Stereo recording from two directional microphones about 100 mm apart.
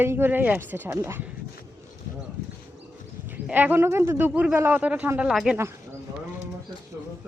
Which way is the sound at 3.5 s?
20° right (ahead or behind).